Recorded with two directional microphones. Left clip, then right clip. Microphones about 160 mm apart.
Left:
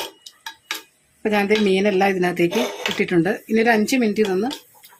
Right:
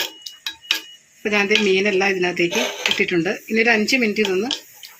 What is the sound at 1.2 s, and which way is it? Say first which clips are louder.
A woman's voice: right 1 dB; 55° left (ahead or behind).